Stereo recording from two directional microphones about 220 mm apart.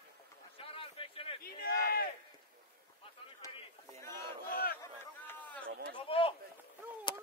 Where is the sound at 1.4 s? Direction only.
45° left (ahead or behind).